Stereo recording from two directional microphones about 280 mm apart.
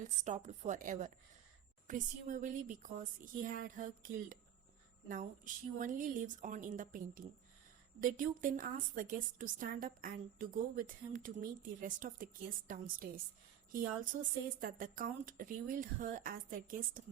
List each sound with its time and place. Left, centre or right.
0.0 s a woman's voice: right
5.8 s a woman's voice: right